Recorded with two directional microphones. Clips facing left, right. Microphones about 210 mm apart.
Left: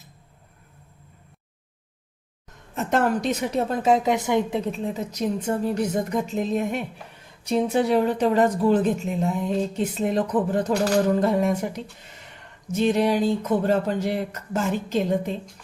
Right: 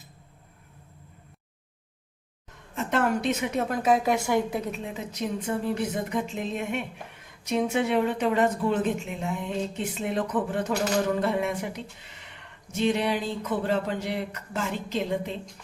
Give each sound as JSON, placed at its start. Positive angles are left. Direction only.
{"t": 2.7, "sound": "a woman's voice", "side_deg": 40}
{"t": 4.8, "sound": "speech", "side_deg": 40}
{"t": 12.7, "sound": "a sound", "side_deg": 45}